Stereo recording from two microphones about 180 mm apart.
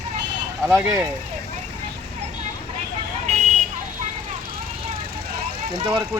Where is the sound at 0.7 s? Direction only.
10° right (ahead or behind).